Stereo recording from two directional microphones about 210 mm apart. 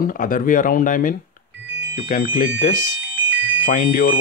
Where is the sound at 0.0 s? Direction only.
40° left (ahead or behind).